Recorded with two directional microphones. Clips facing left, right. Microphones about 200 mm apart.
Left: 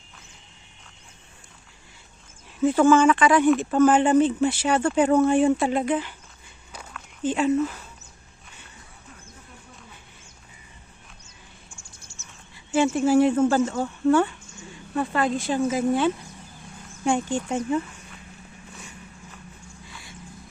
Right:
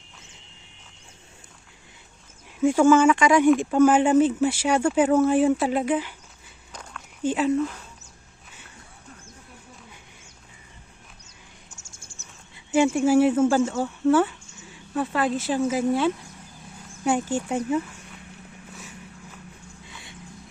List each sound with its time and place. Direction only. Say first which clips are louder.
2.6 s speech: even; 10° right (ahead or behind)
7.2 s speech: even; 5° right (ahead or behind)
7.5 s speech: left 1 dB; 5° left (ahead or behind)
11.9 s a sound: even; 50° right (ahead or behind)
12.5 s speech: right 1 dB; 15° right (ahead or behind)
19.9 s vehicle: even; 20° right (ahead or behind)